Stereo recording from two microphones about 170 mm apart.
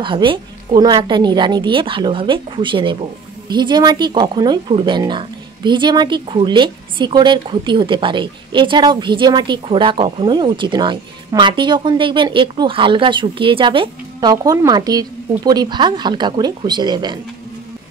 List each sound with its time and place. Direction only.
0.0 s speech: 30° right (ahead or behind)